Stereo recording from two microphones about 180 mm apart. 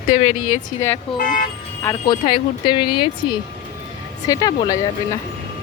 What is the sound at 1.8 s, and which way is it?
Speech, 15° left (ahead or behind).